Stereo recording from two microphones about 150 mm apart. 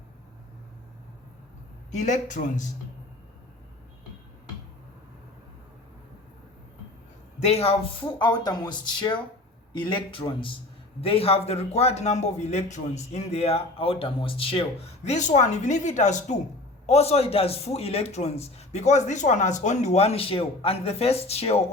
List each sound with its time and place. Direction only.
1.9 s speech: 55° left (ahead or behind)
7.3 s speech: 45° left (ahead or behind)